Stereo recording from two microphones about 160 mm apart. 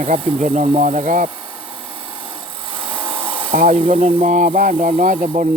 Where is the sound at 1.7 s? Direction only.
35° right (ahead or behind).